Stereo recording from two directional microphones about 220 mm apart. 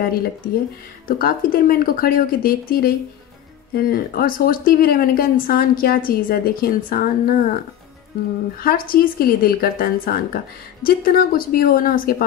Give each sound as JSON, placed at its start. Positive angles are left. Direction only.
{"t": 0.0, "sound": "speech", "side_deg": 45}